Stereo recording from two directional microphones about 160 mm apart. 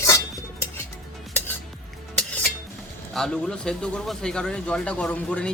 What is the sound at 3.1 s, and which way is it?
A man's voice, 5° left (ahead or behind).